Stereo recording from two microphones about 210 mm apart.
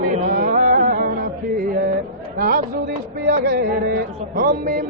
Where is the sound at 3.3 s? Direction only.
45° right (ahead or behind).